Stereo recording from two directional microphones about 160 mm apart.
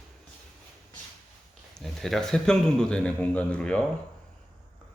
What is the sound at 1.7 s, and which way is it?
Speech, centre (ahead or behind).